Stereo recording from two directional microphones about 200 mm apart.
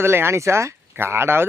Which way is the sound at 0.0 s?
10° right (ahead or behind).